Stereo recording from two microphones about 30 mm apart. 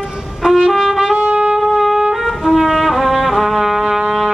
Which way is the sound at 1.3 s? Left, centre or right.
Right.